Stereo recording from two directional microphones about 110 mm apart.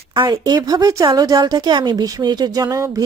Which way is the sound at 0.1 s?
45° right (ahead or behind).